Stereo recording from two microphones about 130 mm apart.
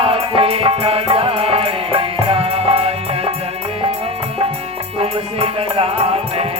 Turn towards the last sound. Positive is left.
turn(degrees=-50)  # may be behind; listen again after turning